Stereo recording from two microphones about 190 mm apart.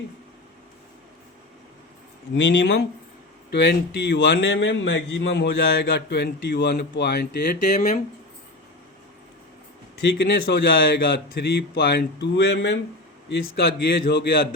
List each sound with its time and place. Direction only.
2.3 s speech: 70° left (ahead or behind); by 8.0 s 45° left (ahead or behind)
10.0 s speech: 65° left (ahead or behind)